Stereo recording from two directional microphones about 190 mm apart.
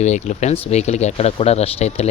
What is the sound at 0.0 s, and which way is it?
Speech, 35° left (ahead or behind).